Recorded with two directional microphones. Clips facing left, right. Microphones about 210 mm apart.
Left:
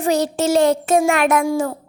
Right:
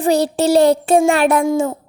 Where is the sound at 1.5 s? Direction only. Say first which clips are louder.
Right 3 dB; 20° right (ahead or behind).